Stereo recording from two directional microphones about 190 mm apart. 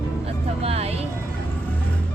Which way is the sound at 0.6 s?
30° right (ahead or behind).